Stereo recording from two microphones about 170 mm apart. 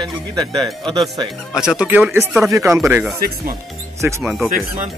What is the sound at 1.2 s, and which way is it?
Speech, 30° right (ahead or behind).